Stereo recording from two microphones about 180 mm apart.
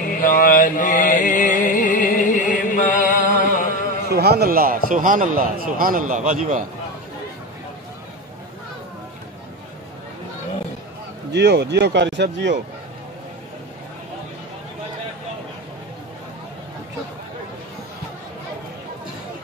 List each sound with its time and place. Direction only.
0.2 s mantra: 50° left (ahead or behind)
4.1 s a man's voice: 65° right (ahead or behind); by 6.6 s 45° right (ahead or behind)
11.3 s speech: 65° right (ahead or behind)